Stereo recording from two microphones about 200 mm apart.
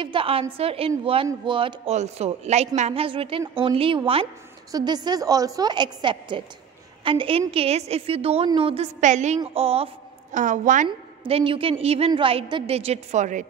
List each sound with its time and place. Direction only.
0.0 s a woman's voice: 25° right (ahead or behind)
10.3 s a woman's voice: 40° right (ahead or behind)
10.9 s a woman's voice: 25° right (ahead or behind)